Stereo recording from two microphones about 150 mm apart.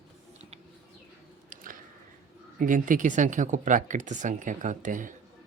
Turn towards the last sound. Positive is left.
turn(degrees=-60)  # may be behind; listen again after turning